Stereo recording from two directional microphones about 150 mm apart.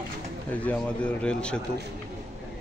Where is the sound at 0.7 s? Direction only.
5° left (ahead or behind).